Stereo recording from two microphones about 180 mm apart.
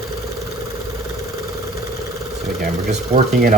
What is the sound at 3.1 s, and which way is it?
Speech, 55° right (ahead or behind).